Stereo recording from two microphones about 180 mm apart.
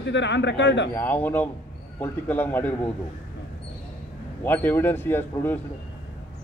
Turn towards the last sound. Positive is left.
turn(degrees=10)  # may be behind; listen again after turning